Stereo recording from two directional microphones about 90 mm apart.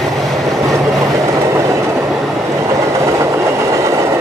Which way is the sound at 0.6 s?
35° right (ahead or behind).